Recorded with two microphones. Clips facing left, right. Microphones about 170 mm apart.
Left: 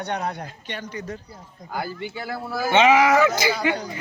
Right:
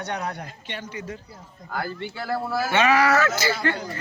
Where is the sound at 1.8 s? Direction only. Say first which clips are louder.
Even; 5° left (ahead or behind).